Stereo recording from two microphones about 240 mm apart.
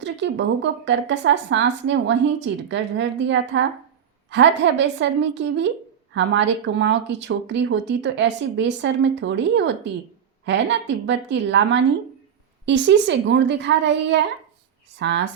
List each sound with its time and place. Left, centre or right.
0.0 s speech: right